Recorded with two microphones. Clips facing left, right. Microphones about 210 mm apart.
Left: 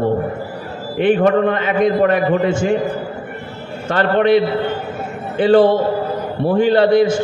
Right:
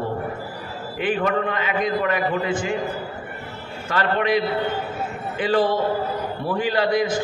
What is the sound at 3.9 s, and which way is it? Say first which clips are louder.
Speech: left 7 dB; 30° left (ahead or behind).